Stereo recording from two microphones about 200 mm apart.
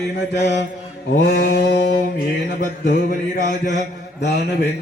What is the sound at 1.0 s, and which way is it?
Music, 55° left (ahead or behind).